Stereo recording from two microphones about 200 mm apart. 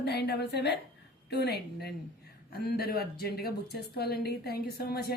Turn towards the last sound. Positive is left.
turn(degrees=50)  # may be behind; listen again after turning